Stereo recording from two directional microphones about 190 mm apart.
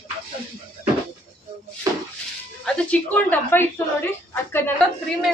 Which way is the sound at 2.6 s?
5° left (ahead or behind).